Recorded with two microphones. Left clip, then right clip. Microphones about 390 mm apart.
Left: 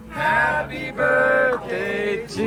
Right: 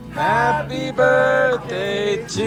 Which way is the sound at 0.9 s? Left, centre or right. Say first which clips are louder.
Right 3 dB; centre.